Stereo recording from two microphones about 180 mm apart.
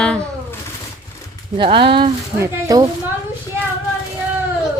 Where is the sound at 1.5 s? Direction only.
30° right (ahead or behind).